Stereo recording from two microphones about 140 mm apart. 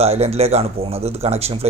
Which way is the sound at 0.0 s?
45° right (ahead or behind).